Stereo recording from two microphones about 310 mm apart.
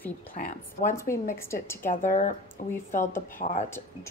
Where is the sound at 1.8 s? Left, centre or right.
Left.